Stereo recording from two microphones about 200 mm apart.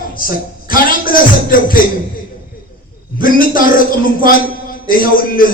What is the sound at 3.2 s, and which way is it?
Speech, 45° left (ahead or behind).